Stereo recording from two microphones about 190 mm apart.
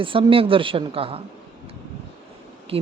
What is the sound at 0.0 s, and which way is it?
Speech, 30° right (ahead or behind).